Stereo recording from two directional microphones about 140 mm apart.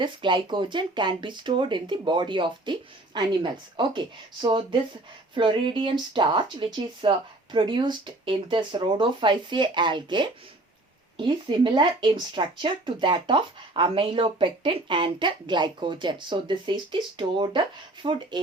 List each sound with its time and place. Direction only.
0.0 s speech: 35° right (ahead or behind)